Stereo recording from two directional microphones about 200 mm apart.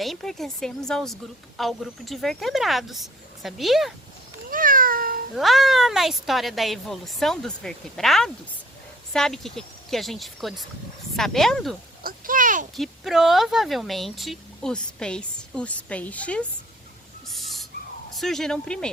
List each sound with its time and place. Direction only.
0.0 s a woman's voice: centre (ahead or behind)
4.4 s cat: 45° right (ahead or behind)
5.3 s a woman's voice: centre (ahead or behind)
12.0 s a sound: 45° right (ahead or behind)
12.7 s a woman's voice: centre (ahead or behind)
17.2 s owl: centre (ahead or behind)
18.1 s a woman's voice: centre (ahead or behind)